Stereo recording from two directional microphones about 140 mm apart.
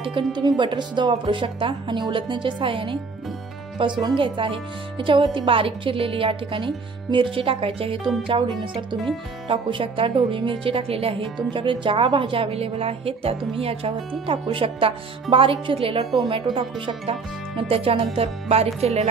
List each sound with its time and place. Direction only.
0.0 s a woman's voice: 35° right (ahead or behind)
4.0 s a woman's voice: 35° right (ahead or behind)